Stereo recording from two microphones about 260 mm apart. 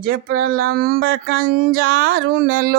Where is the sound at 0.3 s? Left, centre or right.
Right.